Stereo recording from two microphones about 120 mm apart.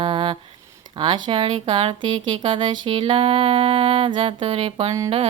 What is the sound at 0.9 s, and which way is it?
Speech, 40° right (ahead or behind).